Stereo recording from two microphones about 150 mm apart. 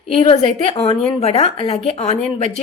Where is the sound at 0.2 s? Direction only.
45° left (ahead or behind).